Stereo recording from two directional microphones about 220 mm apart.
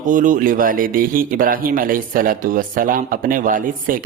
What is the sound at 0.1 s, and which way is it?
Speech, 35° right (ahead or behind).